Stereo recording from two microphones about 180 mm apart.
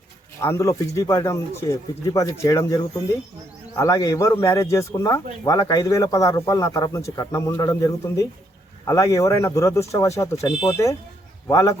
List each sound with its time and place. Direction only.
0.4 s a man's voice: 15° left (ahead or behind)
10.3 s speech: 35° left (ahead or behind)
10.7 s a man's voice: 15° left (ahead or behind)